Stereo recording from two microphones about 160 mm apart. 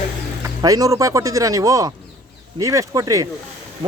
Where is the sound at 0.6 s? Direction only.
20° right (ahead or behind).